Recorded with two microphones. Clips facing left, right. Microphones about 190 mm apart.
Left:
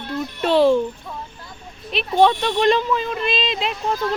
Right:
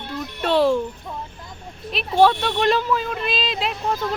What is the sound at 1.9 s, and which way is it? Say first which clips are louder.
Speech: even; centre (ahead or behind).